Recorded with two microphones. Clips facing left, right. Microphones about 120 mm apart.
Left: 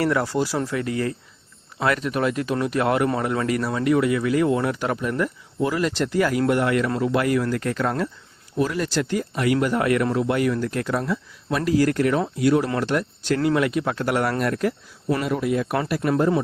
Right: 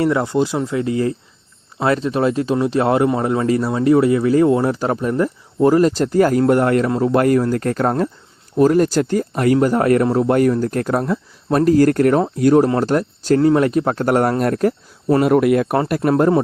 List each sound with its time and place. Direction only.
0.0 s speech: 20° right (ahead or behind); by 14.7 s 40° right (ahead or behind)
15.2 s speech: 60° right (ahead or behind)
16.0 s speech: 50° right (ahead or behind)